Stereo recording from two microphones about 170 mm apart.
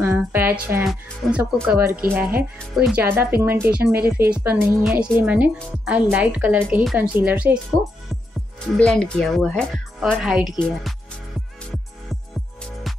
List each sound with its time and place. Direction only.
0.0 s music: 15° right (ahead or behind)
0.8 s a woman's voice: 5° right (ahead or behind)
3.9 s speech: 65° right (ahead or behind)
4.3 s a woman's voice: 10° right (ahead or behind)
8.7 s speech: 5° left (ahead or behind)